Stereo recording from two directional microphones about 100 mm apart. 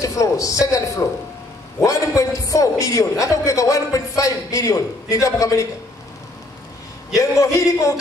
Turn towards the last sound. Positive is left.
turn(degrees=35)  # may be behind; listen again after turning